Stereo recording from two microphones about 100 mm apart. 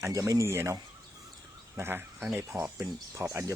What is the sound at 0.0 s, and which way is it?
Speech, 35° right (ahead or behind).